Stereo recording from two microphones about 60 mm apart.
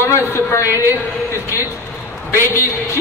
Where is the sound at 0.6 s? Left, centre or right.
Right.